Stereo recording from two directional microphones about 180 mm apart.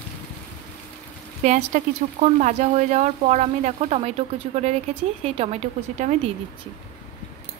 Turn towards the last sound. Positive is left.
turn(degrees=-40)  # may be behind; listen again after turning